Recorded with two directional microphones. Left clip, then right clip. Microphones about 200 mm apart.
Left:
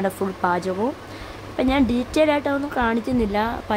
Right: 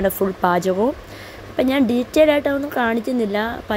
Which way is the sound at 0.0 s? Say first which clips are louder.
Right 4 dB; 15° right (ahead or behind).